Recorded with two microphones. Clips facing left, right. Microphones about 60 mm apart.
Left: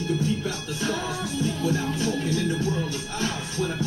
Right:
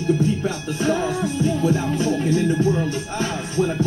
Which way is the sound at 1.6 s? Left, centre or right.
Right.